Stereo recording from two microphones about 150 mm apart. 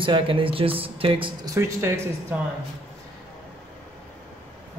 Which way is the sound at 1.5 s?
20° right (ahead or behind).